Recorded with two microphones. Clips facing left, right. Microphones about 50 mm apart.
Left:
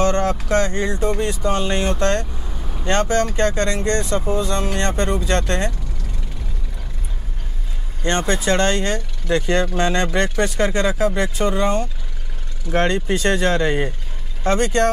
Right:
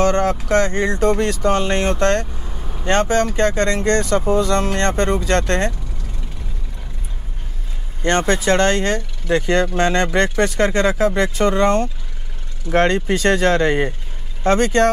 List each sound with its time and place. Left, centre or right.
0.0 s a sound: right
0.5 s speech: right
0.9 s speech: right
2.3 s vehicle: centre
2.8 s speech: right
8.0 s speech: right